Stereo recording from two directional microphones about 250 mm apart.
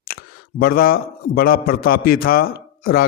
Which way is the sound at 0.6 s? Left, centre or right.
Left.